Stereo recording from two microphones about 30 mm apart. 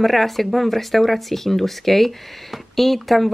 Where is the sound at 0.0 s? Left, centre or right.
Centre.